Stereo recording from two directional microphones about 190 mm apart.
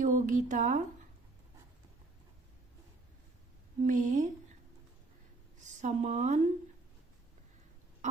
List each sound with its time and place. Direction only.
0.0 s speech: 40° right (ahead or behind)
3.8 s speech: 40° right (ahead or behind)
5.5 s speech: 40° right (ahead or behind)